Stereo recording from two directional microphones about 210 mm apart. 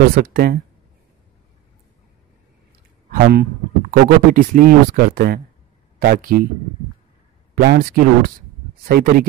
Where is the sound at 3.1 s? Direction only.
45° right (ahead or behind).